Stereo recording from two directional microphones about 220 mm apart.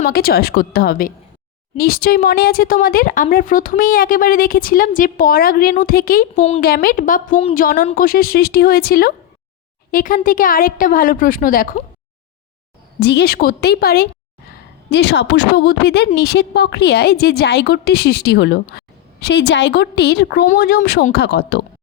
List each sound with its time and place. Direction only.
0.1 s a woman's voice: 45° left (ahead or behind)
13.0 s a woman's voice: 50° left (ahead or behind)